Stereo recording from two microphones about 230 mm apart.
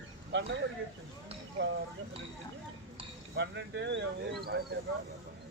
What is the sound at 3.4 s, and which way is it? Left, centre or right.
Speech, right.